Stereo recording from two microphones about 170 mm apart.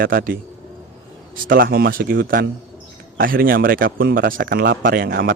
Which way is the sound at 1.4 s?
60° right (ahead or behind).